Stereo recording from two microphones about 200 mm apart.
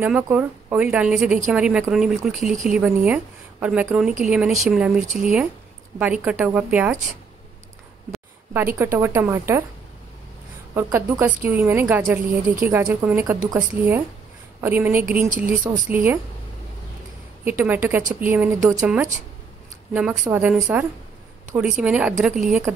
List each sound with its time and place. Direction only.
0.0 s a woman's voice: 10° right (ahead or behind)
5.0 s speech: 35° right (ahead or behind)
5.9 s a woman's voice: 5° right (ahead or behind)
8.7 s a woman's voice: 10° right (ahead or behind)
10.7 s a woman's voice: 15° right (ahead or behind)
15.2 s speech: 40° right (ahead or behind)
15.9 s a woman's voice: 10° right (ahead or behind)
17.5 s a woman's voice: 10° right (ahead or behind)
19.9 s a woman's voice: 5° right (ahead or behind)